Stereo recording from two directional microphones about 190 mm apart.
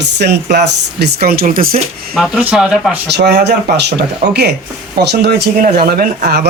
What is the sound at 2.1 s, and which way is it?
Speech, centre (ahead or behind).